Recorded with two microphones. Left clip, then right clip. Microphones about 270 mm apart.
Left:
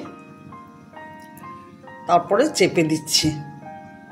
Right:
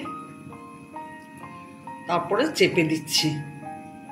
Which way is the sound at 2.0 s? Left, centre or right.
Left.